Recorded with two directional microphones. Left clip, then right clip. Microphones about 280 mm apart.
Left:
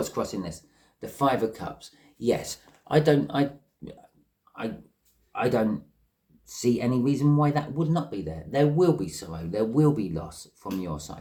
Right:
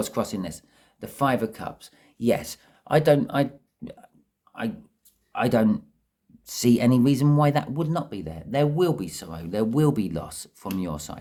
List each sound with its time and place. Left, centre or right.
0.0 s speech: right
5.3 s speech: right